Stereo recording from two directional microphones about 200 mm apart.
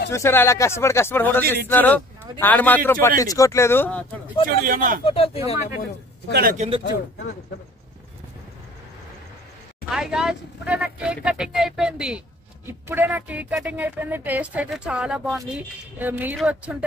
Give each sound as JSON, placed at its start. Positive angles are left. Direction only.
{"t": 0.1, "sound": "speech", "side_deg": 15}
{"t": 4.6, "sound": "speech", "side_deg": -40}
{"t": 5.0, "sound": "speech", "side_deg": 30}
{"t": 6.3, "sound": "speech", "side_deg": -45}
{"t": 9.9, "sound": "speech", "side_deg": -5}